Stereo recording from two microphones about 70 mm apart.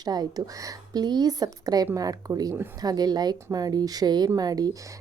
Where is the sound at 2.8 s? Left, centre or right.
Right.